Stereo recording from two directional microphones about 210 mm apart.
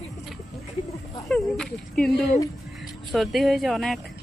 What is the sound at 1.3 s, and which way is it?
Speech, 5° left (ahead or behind).